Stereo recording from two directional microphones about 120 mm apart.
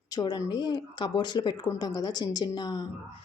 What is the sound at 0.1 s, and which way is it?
A woman's voice, 30° left (ahead or behind).